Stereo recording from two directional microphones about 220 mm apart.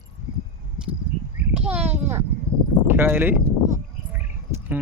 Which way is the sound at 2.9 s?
10° right (ahead or behind).